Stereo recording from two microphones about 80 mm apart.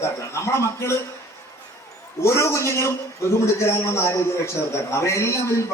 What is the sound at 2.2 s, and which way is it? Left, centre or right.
A man's voice, left.